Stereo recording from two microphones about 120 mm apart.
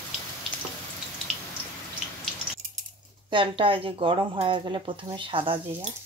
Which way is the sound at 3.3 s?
45° right (ahead or behind).